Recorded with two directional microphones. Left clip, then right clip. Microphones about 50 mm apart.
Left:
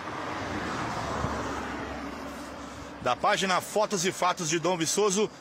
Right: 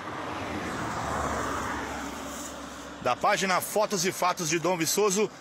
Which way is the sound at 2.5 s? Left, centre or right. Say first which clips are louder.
Right 1 dB; right.